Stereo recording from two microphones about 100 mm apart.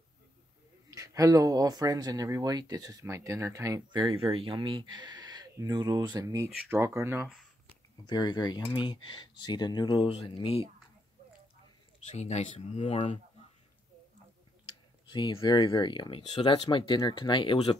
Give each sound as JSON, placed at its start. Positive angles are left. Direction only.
{"t": 0.8, "sound": "speech", "side_deg": -35}
{"t": 3.9, "sound": "speech", "side_deg": -50}
{"t": 4.2, "sound": "speech", "side_deg": -70}
{"t": 8.1, "sound": "speech", "side_deg": 45}
{"t": 9.9, "sound": "speech", "side_deg": 80}
{"t": 12.3, "sound": "speech", "side_deg": 90}
{"t": 15.0, "sound": "speech", "side_deg": 55}